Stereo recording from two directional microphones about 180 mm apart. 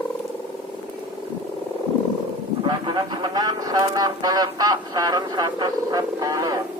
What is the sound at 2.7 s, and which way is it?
Vehicle, 25° right (ahead or behind).